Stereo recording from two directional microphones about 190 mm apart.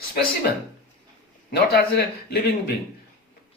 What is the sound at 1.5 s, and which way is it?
Speech, 60° left (ahead or behind).